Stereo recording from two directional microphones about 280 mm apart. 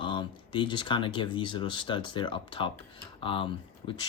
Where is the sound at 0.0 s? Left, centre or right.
Centre.